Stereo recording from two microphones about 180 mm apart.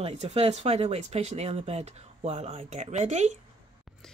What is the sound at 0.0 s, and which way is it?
Speech, 35° right (ahead or behind).